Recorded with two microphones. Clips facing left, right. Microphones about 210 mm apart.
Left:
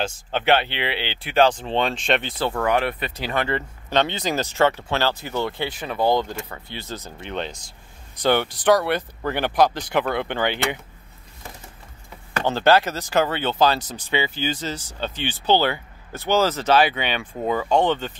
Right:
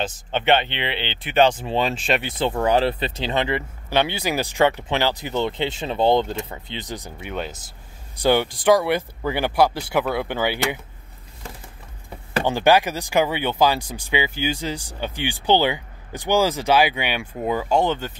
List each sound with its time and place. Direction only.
0.3 s speech: centre (ahead or behind)
2.3 s speech: 20° right (ahead or behind)
12.4 s speech: 15° right (ahead or behind)